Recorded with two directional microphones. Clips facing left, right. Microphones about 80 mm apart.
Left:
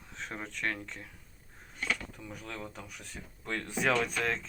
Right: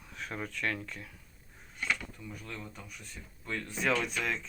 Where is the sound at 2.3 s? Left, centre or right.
Left.